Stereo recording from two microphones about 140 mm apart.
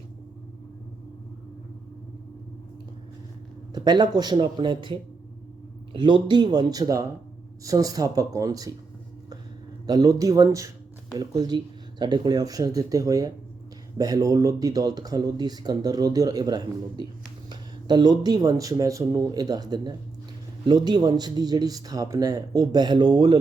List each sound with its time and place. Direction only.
3.8 s speech: 30° right (ahead or behind)
9.8 s speech: 30° right (ahead or behind)